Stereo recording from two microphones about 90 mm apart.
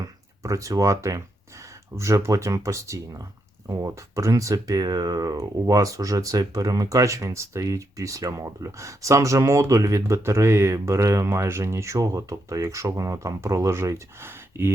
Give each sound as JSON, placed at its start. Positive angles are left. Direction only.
{"t": 0.4, "sound": "speech", "side_deg": -40}